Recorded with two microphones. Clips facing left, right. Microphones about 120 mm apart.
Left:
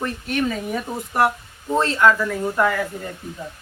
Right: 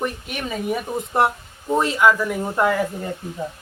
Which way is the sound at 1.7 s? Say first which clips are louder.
Even; 10° right (ahead or behind).